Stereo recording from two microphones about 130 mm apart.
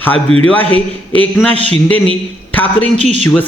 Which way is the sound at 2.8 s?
60° right (ahead or behind).